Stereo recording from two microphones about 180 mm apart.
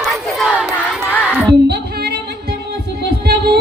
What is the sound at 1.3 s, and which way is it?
Music, 5° right (ahead or behind).